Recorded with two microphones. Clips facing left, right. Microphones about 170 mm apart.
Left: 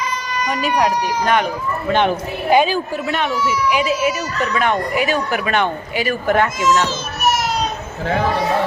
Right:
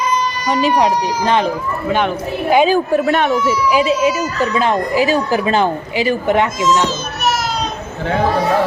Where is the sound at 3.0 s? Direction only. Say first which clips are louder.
Right 5 dB; 50° right (ahead or behind).